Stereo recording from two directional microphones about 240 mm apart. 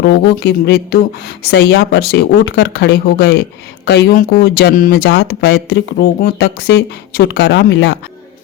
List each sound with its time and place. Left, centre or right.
0.0 s speech: left